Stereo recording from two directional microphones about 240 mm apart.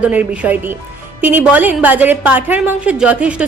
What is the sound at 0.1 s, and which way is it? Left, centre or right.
A woman's voice, centre.